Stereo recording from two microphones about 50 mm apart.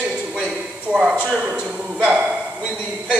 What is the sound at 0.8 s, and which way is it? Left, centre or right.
Speech, right.